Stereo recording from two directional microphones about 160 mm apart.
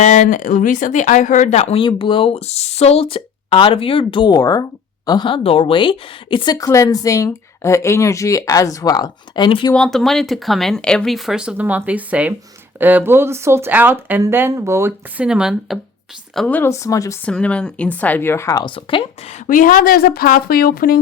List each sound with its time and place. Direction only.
0.0 s speech: 50° left (ahead or behind); by 9.7 s 30° left (ahead or behind)
9.7 s speech: 5° left (ahead or behind); by 14.9 s 20° right (ahead or behind)
15.2 s speech: 5° right (ahead or behind); by 17.2 s 20° left (ahead or behind)
17.2 s speech: 5° left (ahead or behind); by 19.4 s 35° left (ahead or behind)
19.5 s speech: 60° left (ahead or behind)